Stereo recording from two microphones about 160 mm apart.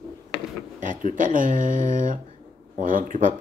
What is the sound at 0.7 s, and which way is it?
Speech, 55° right (ahead or behind).